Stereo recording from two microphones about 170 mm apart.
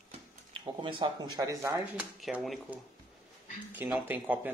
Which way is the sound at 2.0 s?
5° right (ahead or behind).